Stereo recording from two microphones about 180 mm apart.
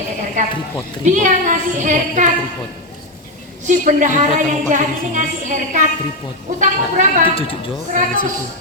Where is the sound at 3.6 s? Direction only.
45° right (ahead or behind).